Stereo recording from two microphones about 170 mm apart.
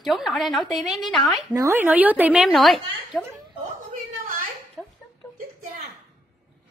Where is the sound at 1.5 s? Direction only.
15° right (ahead or behind); by 3.3 s centre (ahead or behind).